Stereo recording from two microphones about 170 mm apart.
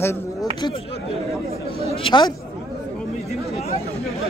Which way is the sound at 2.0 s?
25° left (ahead or behind).